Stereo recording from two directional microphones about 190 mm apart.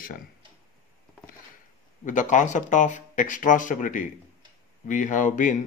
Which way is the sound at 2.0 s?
40° left (ahead or behind).